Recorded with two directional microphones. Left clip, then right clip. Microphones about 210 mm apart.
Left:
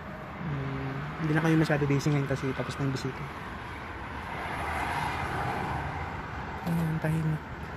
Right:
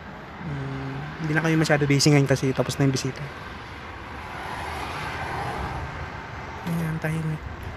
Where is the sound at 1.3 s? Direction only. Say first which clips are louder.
Right 4 dB; 10° right (ahead or behind).